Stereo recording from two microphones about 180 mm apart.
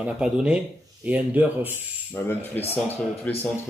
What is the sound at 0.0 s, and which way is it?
Speech, 5° right (ahead or behind).